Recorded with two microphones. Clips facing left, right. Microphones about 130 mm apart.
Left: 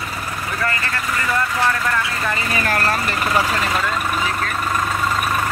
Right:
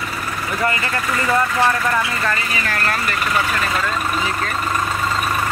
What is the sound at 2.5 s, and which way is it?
Speech, 45° left (ahead or behind).